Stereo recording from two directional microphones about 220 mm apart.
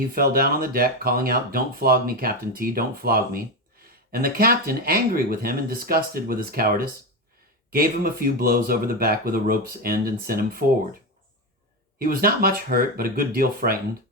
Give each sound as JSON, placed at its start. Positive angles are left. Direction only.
{"t": 0.1, "sound": "speech", "side_deg": -40}
{"t": 11.9, "sound": "speech", "side_deg": -40}